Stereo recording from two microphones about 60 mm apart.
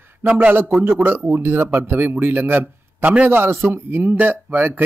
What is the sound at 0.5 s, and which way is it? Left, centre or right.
Speech, right.